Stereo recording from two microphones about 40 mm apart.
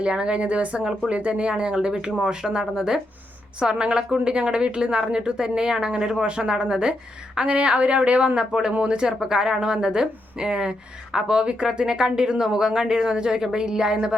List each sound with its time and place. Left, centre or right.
0.0 s a woman's voice: right
7.3 s a woman's voice: right